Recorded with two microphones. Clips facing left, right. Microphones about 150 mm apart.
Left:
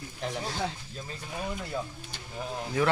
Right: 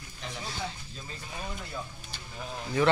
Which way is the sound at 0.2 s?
45° left (ahead or behind).